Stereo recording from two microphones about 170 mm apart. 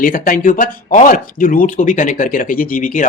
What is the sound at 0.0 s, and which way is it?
Speech, 60° left (ahead or behind).